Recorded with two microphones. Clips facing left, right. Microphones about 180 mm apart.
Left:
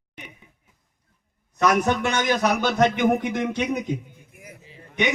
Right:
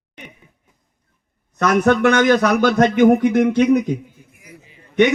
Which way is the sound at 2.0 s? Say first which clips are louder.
Right 8 dB; 60° right (ahead or behind).